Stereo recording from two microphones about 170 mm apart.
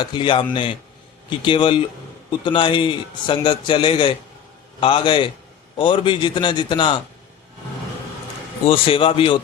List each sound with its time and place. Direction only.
0.0 s a man's voice: 30° left (ahead or behind)
8.6 s a man's voice: 35° left (ahead or behind)